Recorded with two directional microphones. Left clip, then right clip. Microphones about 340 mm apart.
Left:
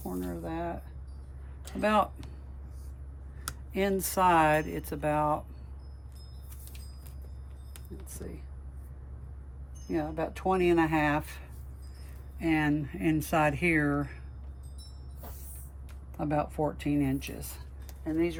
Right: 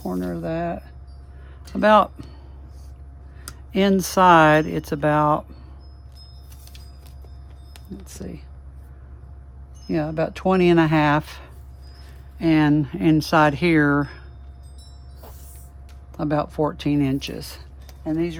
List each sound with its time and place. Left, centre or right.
0.1 s speech: right
1.8 s speech: centre
3.7 s speech: right
7.7 s a sound: centre
9.9 s speech: right
16.1 s speech: centre
17.8 s a sound: right